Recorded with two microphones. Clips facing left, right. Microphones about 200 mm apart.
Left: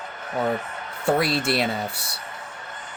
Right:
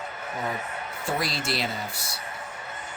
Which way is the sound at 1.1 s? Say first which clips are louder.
Left 8 dB; 60° left (ahead or behind).